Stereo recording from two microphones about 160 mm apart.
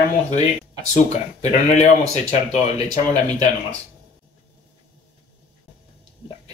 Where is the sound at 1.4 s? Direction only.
45° left (ahead or behind).